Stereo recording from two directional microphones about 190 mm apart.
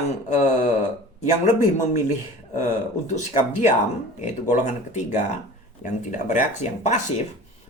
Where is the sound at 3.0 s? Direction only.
40° left (ahead or behind).